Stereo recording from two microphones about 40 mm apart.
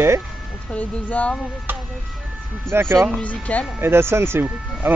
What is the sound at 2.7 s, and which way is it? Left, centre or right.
Speech, right.